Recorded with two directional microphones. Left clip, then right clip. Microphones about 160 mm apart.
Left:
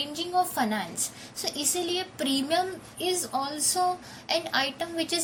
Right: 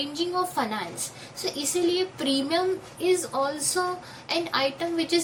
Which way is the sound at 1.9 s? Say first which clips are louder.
Right 3 dB; 50° left (ahead or behind).